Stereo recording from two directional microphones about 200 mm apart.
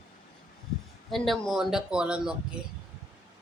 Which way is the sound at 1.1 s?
Centre (ahead or behind).